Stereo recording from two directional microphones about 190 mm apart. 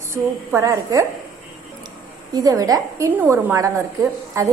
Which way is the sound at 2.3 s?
20° right (ahead or behind).